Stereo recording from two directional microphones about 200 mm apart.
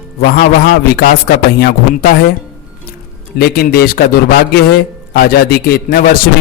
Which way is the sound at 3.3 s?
50° left (ahead or behind).